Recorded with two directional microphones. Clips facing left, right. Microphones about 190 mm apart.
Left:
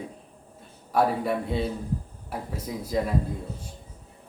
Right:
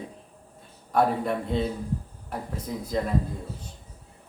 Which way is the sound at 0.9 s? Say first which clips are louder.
Even; 5° left (ahead or behind).